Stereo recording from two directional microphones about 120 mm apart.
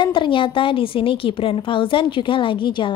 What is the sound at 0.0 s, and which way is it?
A woman's voice, 40° left (ahead or behind).